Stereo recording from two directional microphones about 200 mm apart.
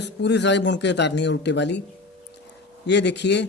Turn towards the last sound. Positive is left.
turn(degrees=60)  # may be behind; listen again after turning